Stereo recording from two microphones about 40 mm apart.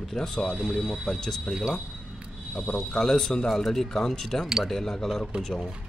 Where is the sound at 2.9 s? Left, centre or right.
Centre.